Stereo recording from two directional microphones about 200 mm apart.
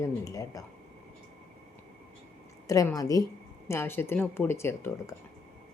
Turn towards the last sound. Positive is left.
turn(degrees=10)  # may be behind; listen again after turning